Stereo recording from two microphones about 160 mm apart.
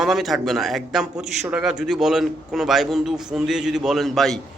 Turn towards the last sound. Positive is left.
turn(degrees=0)  # may be behind; listen again after turning